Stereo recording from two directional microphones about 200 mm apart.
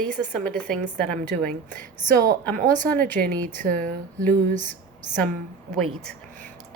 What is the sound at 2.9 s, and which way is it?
Speech, 10° left (ahead or behind).